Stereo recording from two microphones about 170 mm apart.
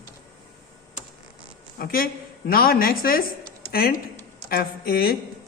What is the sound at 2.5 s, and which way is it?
Speech, 60° left (ahead or behind).